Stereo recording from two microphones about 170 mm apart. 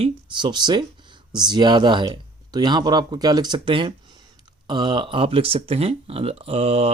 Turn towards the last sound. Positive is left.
turn(degrees=-35)  # may be behind; listen again after turning